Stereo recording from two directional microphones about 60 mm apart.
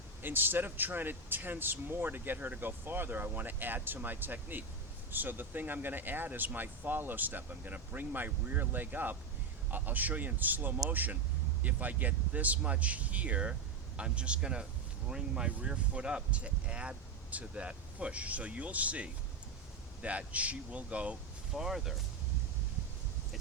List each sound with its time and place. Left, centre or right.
0.2 s speech: right
21.5 s speech: centre